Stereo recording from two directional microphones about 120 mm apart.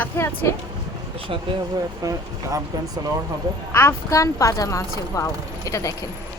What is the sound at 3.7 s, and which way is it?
A woman's voice, 20° left (ahead or behind).